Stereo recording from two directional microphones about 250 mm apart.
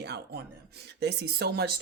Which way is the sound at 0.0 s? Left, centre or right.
Right.